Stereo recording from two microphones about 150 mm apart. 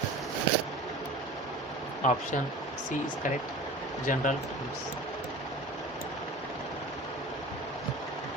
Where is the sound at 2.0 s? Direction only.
55° left (ahead or behind).